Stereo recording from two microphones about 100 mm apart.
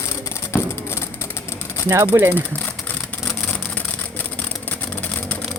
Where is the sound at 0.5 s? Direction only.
25° left (ahead or behind).